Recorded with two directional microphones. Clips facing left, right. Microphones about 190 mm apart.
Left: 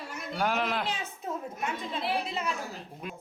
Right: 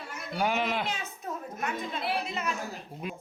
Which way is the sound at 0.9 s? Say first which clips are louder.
Left 1 dB; 30° left (ahead or behind).